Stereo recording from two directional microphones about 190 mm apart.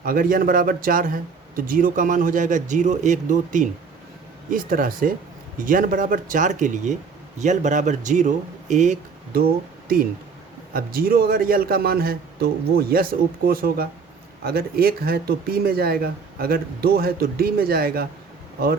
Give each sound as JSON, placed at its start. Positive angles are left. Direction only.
{"t": 0.0, "sound": "a man's voice", "side_deg": -50}
{"t": 10.8, "sound": "a man's voice", "side_deg": -50}